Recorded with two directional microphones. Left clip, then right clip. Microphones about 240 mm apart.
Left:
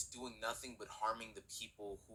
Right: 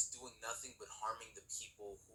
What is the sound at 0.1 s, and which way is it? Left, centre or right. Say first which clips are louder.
A woman's voice: left 4 dB; left.